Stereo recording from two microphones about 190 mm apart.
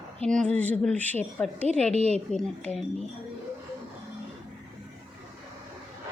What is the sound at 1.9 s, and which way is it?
Speech, 35° right (ahead or behind).